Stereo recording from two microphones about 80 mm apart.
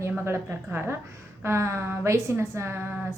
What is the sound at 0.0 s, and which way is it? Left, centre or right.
Speech, right.